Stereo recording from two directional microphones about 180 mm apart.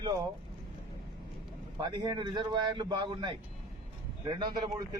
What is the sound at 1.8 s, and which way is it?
A man's voice, 25° right (ahead or behind).